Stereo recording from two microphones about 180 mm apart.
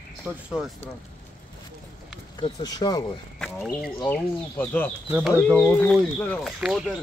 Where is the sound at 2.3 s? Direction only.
25° left (ahead or behind).